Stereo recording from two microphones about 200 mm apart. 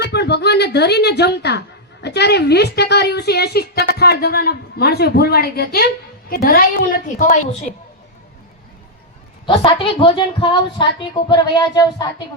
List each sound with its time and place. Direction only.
0.1 s a woman's voice: 55° left (ahead or behind); by 7.7 s 40° left (ahead or behind)
9.5 s a woman's voice: 25° left (ahead or behind)